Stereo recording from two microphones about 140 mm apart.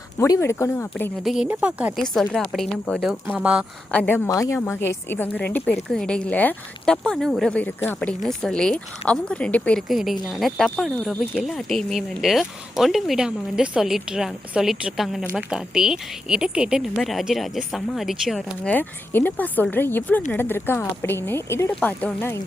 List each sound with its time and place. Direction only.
0.2 s a woman's voice: 20° left (ahead or behind)
1.2 s speech: centre (ahead or behind)
2.0 s speech: centre (ahead or behind)
3.1 s speech: 10° right (ahead or behind)
3.9 s speech: 15° left (ahead or behind)
18.7 s speech: 15° left (ahead or behind)